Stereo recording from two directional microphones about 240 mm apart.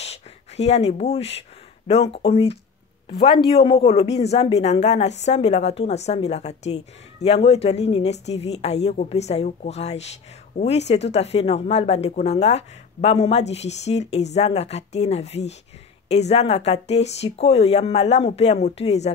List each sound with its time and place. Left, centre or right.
0.0 s a woman's voice: left